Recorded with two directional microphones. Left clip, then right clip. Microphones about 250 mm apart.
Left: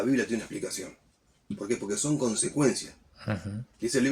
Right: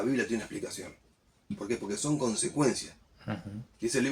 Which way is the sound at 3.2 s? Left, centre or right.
Left.